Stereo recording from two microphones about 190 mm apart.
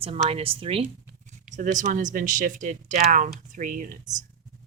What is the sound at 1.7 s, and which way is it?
Speech, 40° right (ahead or behind).